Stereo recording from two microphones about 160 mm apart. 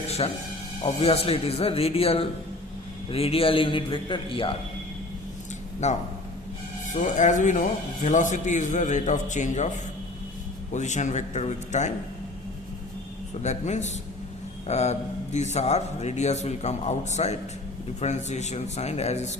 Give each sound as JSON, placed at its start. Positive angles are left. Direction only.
{"t": 0.2, "sound": "a man's voice", "side_deg": 35}
{"t": 5.8, "sound": "a man's voice", "side_deg": 45}
{"t": 10.7, "sound": "a man's voice", "side_deg": 50}
{"t": 13.4, "sound": "a man's voice", "side_deg": 45}